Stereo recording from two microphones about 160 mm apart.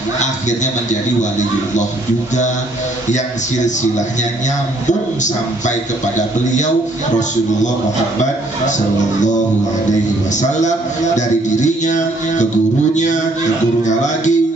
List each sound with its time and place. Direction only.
0.2 s a man's voice: 50° left (ahead or behind)
3.6 s a man's voice: 50° left (ahead or behind)
10.6 s a man's voice: 50° left (ahead or behind)